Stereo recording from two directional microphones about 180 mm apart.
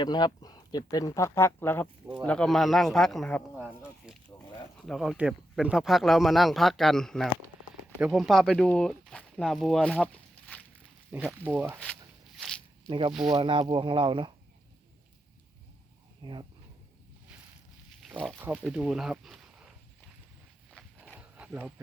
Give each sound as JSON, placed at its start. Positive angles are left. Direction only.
{"t": 0.0, "sound": "speech", "side_deg": 25}
{"t": 3.6, "sound": "a sound", "side_deg": -5}
{"t": 4.9, "sound": "speech", "side_deg": 0}
{"t": 11.1, "sound": "speech", "side_deg": -10}
{"t": 12.9, "sound": "speech", "side_deg": -30}
{"t": 16.2, "sound": "speech", "side_deg": -25}
{"t": 18.0, "sound": "pig", "side_deg": 0}
{"t": 18.3, "sound": "speech", "side_deg": -10}
{"t": 20.7, "sound": "walk", "side_deg": 5}
{"t": 21.2, "sound": "a sound", "side_deg": -5}